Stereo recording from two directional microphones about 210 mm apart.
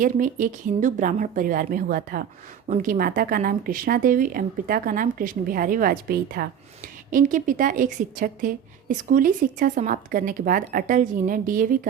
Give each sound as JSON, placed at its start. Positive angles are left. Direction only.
{"t": 0.0, "sound": "a woman's voice", "side_deg": -40}